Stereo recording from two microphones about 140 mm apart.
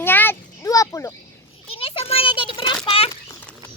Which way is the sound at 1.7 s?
45° left (ahead or behind).